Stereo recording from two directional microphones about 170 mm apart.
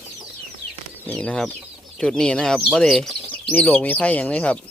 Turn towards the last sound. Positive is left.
turn(degrees=10)  # may be behind; listen again after turning